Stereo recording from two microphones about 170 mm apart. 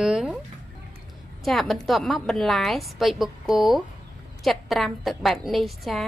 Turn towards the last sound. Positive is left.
turn(degrees=0)  # may be behind; listen again after turning